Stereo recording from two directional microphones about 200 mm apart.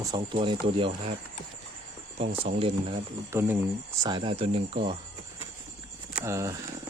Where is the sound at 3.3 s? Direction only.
10° right (ahead or behind).